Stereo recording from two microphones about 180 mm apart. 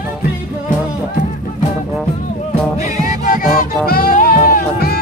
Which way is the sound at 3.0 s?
45° left (ahead or behind).